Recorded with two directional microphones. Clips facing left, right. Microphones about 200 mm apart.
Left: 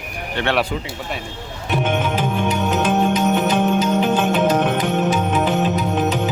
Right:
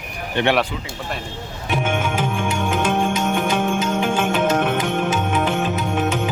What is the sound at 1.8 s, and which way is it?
Speech, 10° right (ahead or behind).